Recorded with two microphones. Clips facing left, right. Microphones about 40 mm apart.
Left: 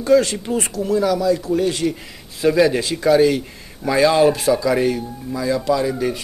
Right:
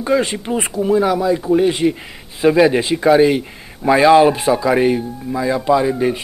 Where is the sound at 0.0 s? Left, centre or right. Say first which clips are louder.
Left 2 dB; right.